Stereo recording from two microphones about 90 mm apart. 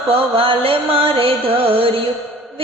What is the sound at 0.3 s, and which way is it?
Music, 90° right.